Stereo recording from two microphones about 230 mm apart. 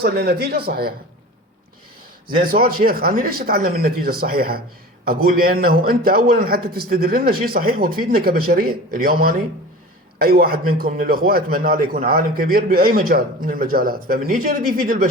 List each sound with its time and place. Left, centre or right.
0.0 s speech: right
2.4 s a man's voice: right